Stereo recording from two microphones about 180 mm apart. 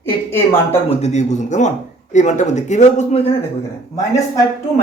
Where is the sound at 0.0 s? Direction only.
15° left (ahead or behind).